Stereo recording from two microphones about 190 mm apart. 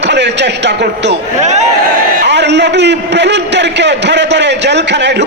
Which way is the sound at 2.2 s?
65° right (ahead or behind).